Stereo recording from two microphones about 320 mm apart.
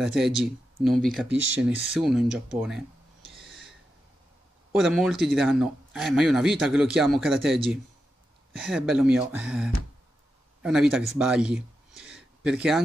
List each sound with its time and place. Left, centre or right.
0.0 s speech: centre
3.2 s owl: centre
3.4 s a sound: centre
4.7 s a man's voice: centre